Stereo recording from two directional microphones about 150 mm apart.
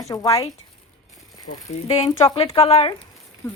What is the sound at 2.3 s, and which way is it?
Speech, 40° left (ahead or behind).